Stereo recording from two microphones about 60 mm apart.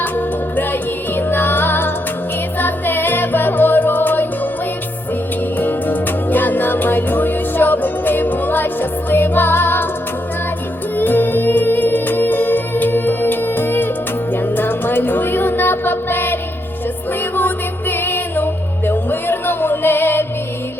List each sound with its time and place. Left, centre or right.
0.0 s music: left
5.5 s music: left
10.9 s music: left